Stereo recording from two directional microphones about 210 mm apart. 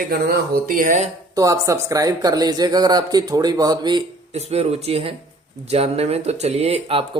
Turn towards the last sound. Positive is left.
turn(degrees=-25)  # may be behind; listen again after turning